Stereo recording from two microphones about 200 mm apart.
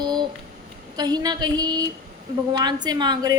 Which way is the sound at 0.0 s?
20° right (ahead or behind).